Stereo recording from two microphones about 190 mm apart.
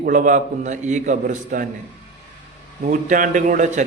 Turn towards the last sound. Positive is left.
turn(degrees=-40)  # may be behind; listen again after turning